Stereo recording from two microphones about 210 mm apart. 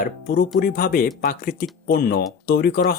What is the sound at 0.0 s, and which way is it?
Speech, 45° left (ahead or behind).